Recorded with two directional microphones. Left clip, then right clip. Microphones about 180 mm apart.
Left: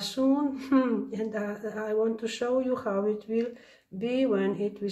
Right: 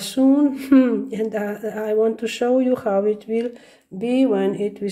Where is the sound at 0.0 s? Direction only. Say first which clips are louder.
Right 9 dB; 30° right (ahead or behind).